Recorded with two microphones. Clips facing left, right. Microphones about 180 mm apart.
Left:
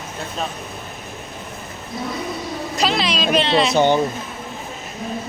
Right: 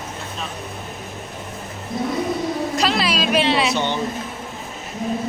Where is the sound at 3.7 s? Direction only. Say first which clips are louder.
Left 7 dB; 45° left (ahead or behind).